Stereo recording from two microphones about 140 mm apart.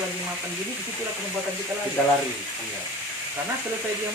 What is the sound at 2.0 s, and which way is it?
Speech, 10° left (ahead or behind).